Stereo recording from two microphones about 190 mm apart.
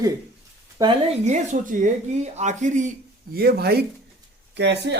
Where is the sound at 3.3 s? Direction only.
55° right (ahead or behind).